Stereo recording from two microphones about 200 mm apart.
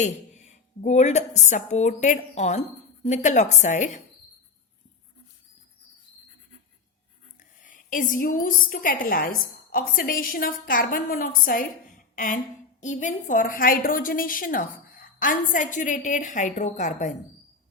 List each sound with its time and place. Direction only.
0.0 s a woman's voice: 35° left (ahead or behind)
7.6 s a woman's voice: 40° left (ahead or behind)
12.1 s a sound: 40° left (ahead or behind)
12.8 s a woman's voice: 35° left (ahead or behind)